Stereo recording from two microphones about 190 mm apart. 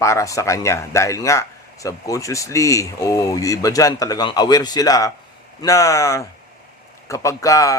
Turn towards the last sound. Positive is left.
turn(degrees=15)  # may be behind; listen again after turning